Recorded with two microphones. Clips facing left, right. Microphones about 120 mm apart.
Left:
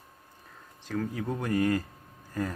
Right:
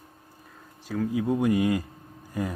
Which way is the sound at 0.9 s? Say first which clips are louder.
Right 6 dB; 5° right (ahead or behind).